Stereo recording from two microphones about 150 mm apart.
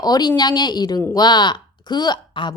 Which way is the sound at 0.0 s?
25° left (ahead or behind).